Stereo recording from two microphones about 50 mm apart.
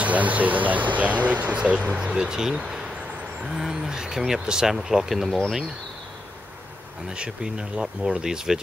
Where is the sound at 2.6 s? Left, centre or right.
Centre.